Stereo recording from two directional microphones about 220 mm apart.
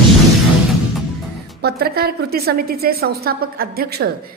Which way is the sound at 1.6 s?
45° right (ahead or behind).